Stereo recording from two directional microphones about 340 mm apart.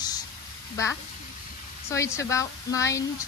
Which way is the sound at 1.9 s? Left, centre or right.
Centre.